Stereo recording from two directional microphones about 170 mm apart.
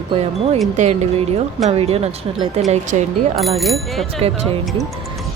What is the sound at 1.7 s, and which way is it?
Speech, 35° right (ahead or behind).